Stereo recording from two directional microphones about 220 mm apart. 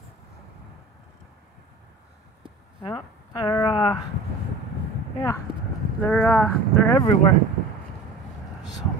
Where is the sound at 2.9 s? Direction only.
15° left (ahead or behind).